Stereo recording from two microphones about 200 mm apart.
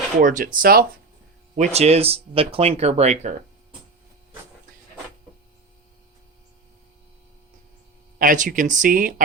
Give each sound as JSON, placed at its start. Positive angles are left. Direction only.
{"t": 0.2, "sound": "speech", "side_deg": -40}
{"t": 1.5, "sound": "speech", "side_deg": -35}
{"t": 8.2, "sound": "speech", "side_deg": -40}